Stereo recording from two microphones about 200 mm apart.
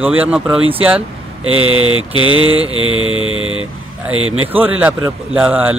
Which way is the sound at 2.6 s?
90° right.